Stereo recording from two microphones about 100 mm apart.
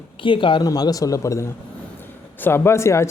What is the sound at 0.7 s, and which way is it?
Speech, 35° left (ahead or behind).